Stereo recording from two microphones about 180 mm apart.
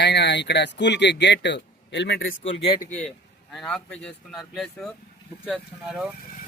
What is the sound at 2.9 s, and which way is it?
Speech, 10° left (ahead or behind).